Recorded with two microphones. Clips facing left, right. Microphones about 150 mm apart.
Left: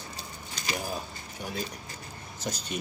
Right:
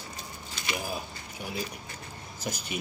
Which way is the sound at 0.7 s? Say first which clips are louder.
Even; 10° right (ahead or behind).